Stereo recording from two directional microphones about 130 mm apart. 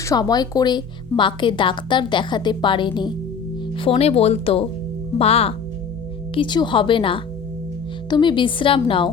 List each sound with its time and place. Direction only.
0.0 s a woman's voice: 30° left (ahead or behind)
3.8 s speech: 50° left (ahead or behind)
6.3 s a woman's voice: 35° left (ahead or behind)